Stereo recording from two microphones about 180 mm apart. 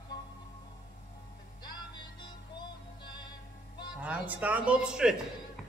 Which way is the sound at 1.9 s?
25° left (ahead or behind).